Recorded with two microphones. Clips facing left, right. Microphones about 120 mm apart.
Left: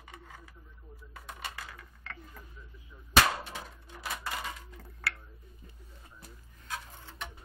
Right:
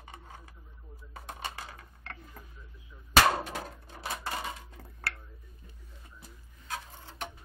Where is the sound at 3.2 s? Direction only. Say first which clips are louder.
Right 5 dB; 45° right (ahead or behind).